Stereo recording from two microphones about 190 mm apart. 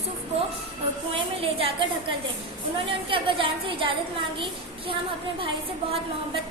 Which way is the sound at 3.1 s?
25° right (ahead or behind).